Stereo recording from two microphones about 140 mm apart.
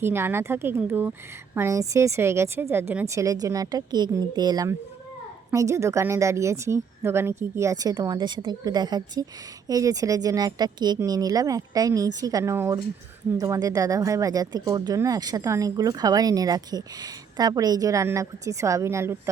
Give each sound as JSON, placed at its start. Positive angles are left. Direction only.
{"t": 0.0, "sound": "speech", "side_deg": -15}